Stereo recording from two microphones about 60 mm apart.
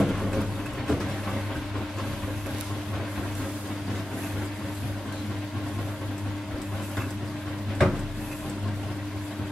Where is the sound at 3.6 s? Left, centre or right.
Centre.